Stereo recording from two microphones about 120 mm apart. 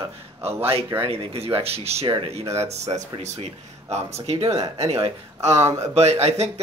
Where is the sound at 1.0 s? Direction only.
55° right (ahead or behind).